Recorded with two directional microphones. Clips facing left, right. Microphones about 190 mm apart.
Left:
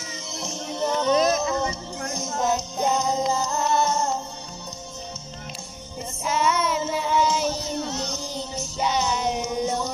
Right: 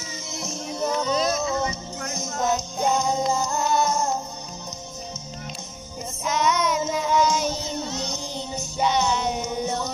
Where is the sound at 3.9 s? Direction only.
15° right (ahead or behind).